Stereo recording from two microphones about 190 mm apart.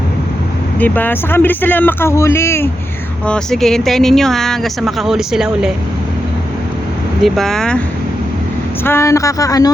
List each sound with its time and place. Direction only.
0.8 s speech: 10° left (ahead or behind)
3.2 s speech: 5° left (ahead or behind)
7.3 s speech: centre (ahead or behind)
8.8 s speech: 15° left (ahead or behind)